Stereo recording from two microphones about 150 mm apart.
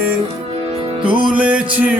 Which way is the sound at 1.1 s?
10° right (ahead or behind).